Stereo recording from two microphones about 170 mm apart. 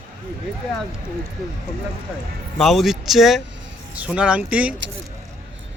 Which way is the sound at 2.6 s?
Centre (ahead or behind).